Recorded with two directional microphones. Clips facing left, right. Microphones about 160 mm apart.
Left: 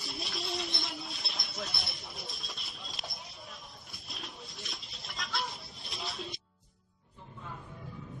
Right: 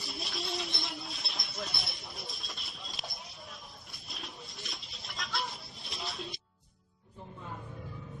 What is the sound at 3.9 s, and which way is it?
Bird, centre (ahead or behind).